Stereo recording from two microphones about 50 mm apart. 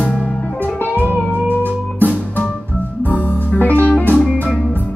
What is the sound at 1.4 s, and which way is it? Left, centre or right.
Music, right.